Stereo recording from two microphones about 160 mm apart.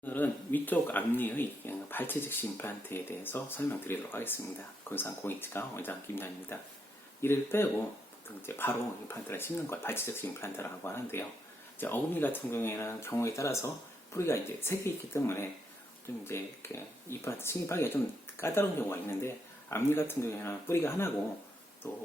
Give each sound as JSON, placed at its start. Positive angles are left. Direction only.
{"t": 0.0, "sound": "speech", "side_deg": 10}